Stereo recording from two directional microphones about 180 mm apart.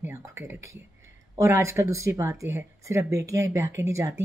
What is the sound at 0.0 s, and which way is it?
Speech, 15° right (ahead or behind).